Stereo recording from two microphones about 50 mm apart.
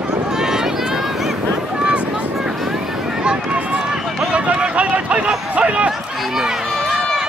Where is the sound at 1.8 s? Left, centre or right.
Right.